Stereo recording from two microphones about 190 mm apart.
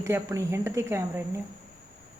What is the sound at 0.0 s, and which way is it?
A woman's voice, 15° right (ahead or behind).